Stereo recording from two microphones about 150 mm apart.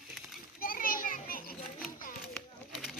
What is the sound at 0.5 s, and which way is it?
Children playing, 70° left (ahead or behind).